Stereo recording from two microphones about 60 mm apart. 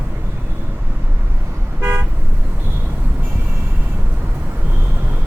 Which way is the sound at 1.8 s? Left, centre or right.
Right.